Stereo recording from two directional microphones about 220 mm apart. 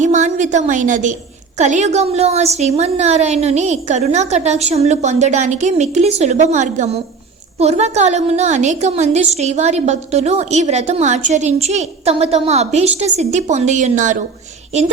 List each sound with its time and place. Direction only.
0.0 s a woman's voice: 35° right (ahead or behind)